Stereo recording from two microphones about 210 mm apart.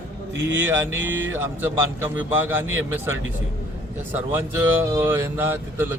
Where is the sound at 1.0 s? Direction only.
65° right (ahead or behind).